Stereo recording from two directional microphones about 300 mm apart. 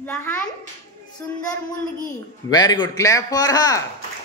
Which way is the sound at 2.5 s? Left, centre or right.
Centre.